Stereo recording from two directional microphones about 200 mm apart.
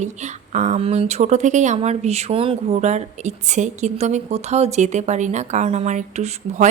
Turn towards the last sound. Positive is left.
turn(degrees=-35)  # may be behind; listen again after turning